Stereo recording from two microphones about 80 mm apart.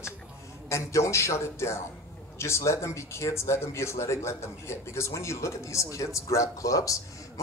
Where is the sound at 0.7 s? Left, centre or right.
Left.